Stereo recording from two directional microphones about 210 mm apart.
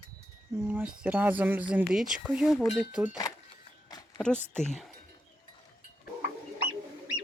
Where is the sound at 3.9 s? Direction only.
15° left (ahead or behind).